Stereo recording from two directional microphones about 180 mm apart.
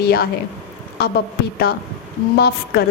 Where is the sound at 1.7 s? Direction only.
60° left (ahead or behind).